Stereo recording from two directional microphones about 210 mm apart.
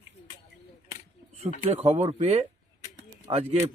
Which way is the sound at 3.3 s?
20° right (ahead or behind).